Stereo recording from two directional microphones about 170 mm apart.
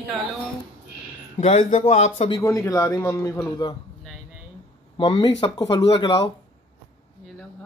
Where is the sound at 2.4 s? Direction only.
20° left (ahead or behind).